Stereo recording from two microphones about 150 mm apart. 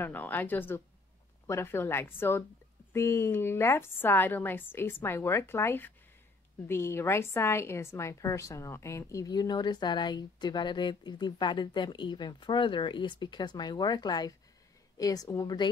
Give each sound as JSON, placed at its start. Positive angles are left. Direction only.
{"t": 0.0, "sound": "a woman's voice", "side_deg": 10}